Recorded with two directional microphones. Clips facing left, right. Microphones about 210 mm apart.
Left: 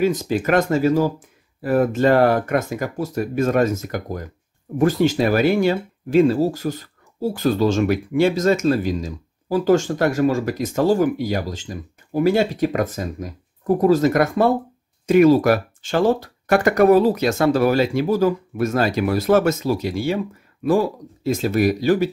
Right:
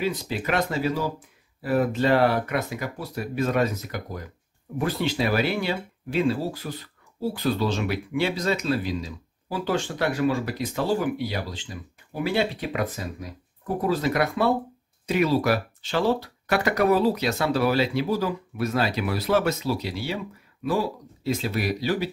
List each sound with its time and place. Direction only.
0.0 s speech: 45° left (ahead or behind)